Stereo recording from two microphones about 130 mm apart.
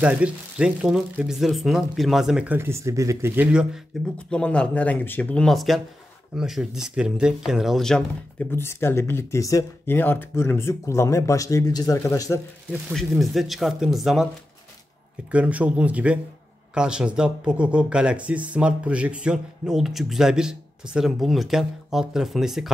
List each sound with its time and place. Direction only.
0.0 s speech: 10° right (ahead or behind)
3.9 s speech: centre (ahead or behind)
8.5 s speech: 20° left (ahead or behind)
12.9 s speech: centre (ahead or behind)
15.3 s speech: 10° right (ahead or behind)